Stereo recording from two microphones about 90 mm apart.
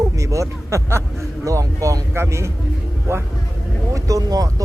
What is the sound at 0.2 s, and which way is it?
Speech, 35° right (ahead or behind).